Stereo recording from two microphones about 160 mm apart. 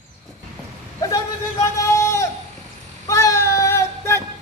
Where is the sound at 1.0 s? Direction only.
20° left (ahead or behind).